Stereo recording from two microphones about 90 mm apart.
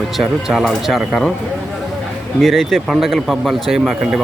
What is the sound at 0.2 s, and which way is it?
Speech, 5° right (ahead or behind).